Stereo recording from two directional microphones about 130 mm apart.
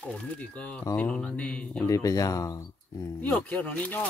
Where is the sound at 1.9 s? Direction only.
25° left (ahead or behind).